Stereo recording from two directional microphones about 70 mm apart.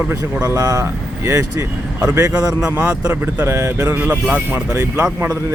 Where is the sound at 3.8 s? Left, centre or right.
Right.